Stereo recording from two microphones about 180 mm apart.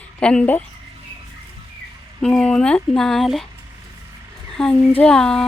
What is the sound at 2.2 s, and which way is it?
Speech, 5° left (ahead or behind).